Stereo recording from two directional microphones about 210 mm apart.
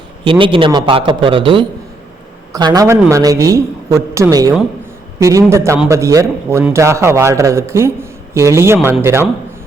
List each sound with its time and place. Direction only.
0.3 s a man's voice: 25° right (ahead or behind)